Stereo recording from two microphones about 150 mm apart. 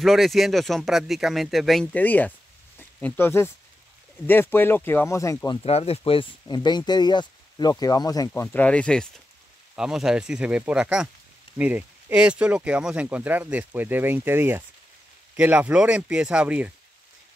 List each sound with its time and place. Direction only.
0.0 s speech: centre (ahead or behind); by 5.6 s 20° left (ahead or behind)
5.6 s speech: 40° left (ahead or behind)
6.4 s speech: 30° left (ahead or behind)
8.3 s speech: 10° left (ahead or behind); by 16.7 s 10° right (ahead or behind)